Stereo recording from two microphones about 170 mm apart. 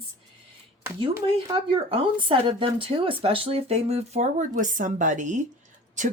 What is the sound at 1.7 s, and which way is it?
Speech, 30° right (ahead or behind).